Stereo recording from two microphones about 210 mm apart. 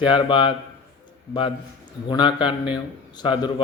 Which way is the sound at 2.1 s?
20° left (ahead or behind).